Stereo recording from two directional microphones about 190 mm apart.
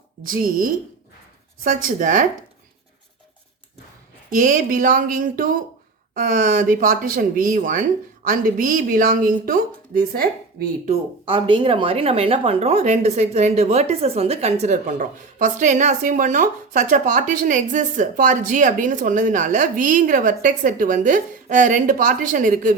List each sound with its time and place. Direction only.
0.3 s speech: 50° right (ahead or behind)
4.3 s speech: 45° right (ahead or behind)
10.8 s speech: 30° right (ahead or behind); by 22.7 s 45° right (ahead or behind)